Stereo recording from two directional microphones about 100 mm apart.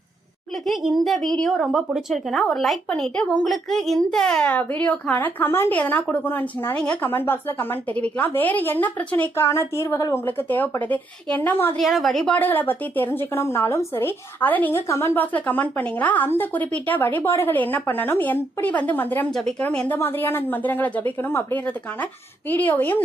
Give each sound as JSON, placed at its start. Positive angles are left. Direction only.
{"t": 0.6, "sound": "a woman's voice", "side_deg": 0}
{"t": 10.2, "sound": "speech", "side_deg": 20}
{"t": 11.8, "sound": "speech", "side_deg": 0}
{"t": 12.3, "sound": "a woman's voice", "side_deg": 20}
{"t": 19.3, "sound": "a woman's voice", "side_deg": 5}